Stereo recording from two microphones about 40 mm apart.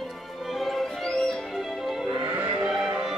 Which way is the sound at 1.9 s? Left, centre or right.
Centre.